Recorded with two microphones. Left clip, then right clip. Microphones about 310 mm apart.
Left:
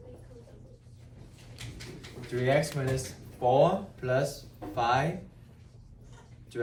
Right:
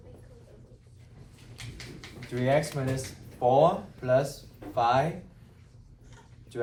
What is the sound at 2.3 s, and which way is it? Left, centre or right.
A man's voice, centre.